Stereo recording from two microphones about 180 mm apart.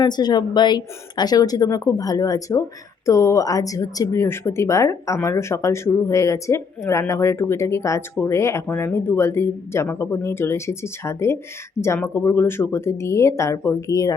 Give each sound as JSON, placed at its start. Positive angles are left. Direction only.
{"t": 0.0, "sound": "a woman's voice", "side_deg": 25}